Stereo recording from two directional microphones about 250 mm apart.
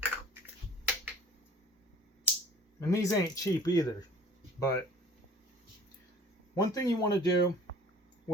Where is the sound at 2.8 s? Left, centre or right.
Centre.